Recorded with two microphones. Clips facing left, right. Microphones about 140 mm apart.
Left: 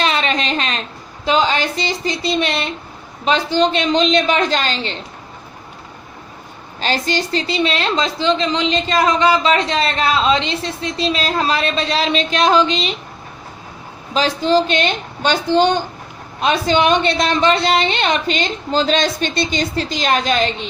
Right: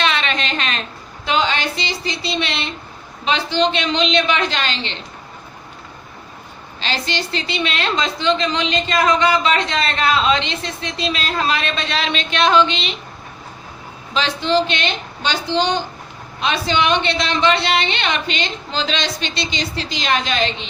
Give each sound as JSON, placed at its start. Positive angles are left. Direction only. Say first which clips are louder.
{"t": 0.0, "sound": "a sound", "louder": "left 2 dB", "side_deg": 35}
{"t": 1.2, "sound": "a woman's voice", "louder": "left 3 dB", "side_deg": 40}
{"t": 6.7, "sound": "a woman's voice", "louder": "left 5 dB", "side_deg": 45}
{"t": 14.1, "sound": "a woman's voice", "louder": "left 3 dB", "side_deg": 40}